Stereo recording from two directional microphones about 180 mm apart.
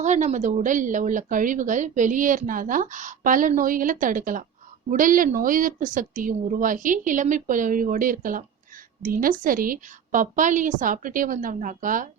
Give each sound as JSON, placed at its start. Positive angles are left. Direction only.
{"t": 0.0, "sound": "a woman's voice", "side_deg": -40}